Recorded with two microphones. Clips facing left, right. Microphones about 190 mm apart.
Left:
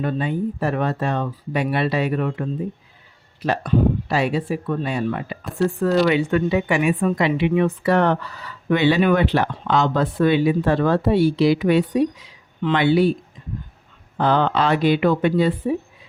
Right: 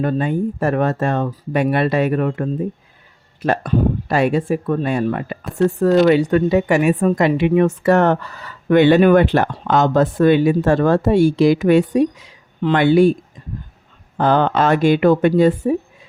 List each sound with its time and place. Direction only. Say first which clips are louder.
0.0 s a woman's voice: right 4 dB; 45° right (ahead or behind)
14.2 s a woman's voice: right 3 dB; 50° right (ahead or behind)